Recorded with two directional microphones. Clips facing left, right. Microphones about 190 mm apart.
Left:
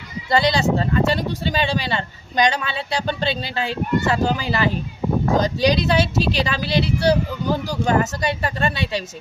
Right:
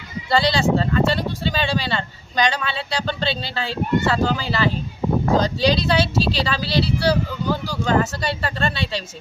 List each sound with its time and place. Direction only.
0.3 s speech: 20° left (ahead or behind)